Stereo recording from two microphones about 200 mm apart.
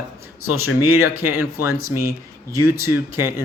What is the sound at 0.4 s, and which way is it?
Speech, 90° left.